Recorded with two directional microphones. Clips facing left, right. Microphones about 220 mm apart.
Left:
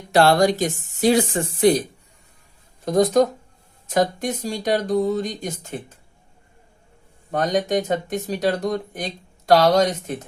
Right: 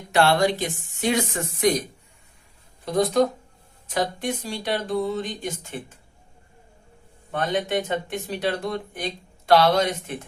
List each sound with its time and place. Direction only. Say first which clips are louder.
0.1 s speech: left 4 dB; 40° left (ahead or behind)
2.8 s speech: left 4 dB; 45° left (ahead or behind)
7.3 s speech: left 4 dB; 40° left (ahead or behind)